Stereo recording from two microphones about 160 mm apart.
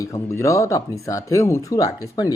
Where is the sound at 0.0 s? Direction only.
20° left (ahead or behind).